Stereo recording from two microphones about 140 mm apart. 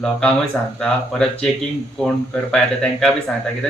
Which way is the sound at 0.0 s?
5° left (ahead or behind).